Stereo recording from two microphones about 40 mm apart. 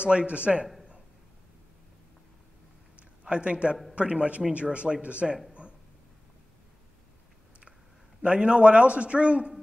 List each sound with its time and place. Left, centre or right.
0.0 s a man's voice: right
3.0 s a sound: right
3.9 s a man's voice: right
8.2 s a man's voice: right